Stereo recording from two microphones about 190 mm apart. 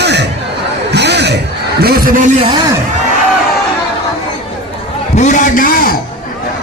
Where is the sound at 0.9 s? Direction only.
65° right (ahead or behind).